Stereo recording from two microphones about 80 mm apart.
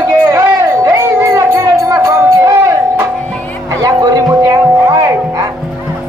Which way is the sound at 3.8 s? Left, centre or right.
Right.